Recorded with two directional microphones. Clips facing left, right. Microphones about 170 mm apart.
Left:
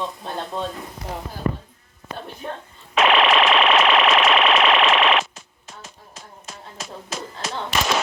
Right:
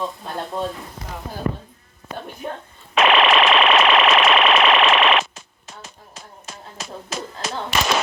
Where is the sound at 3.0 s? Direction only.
80° right.